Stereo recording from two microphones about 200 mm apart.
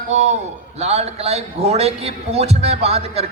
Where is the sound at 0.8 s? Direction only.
30° right (ahead or behind).